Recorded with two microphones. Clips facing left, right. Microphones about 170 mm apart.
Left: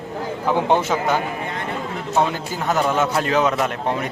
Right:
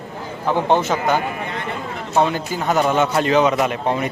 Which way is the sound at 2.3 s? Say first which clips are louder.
Right 2 dB; centre (ahead or behind).